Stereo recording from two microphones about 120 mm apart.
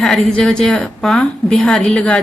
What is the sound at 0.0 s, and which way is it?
A woman's voice, 5° left (ahead or behind).